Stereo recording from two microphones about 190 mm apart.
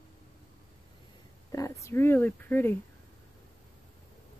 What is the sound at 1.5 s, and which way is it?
Speech, 15° left (ahead or behind).